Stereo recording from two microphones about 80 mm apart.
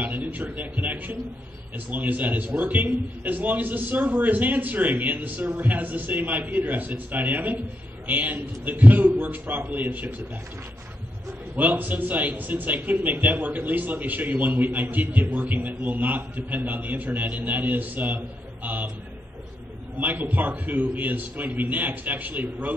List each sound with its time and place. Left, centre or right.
0.0 s a man's voice: right
11.5 s a man's voice: right
20.0 s a man's voice: right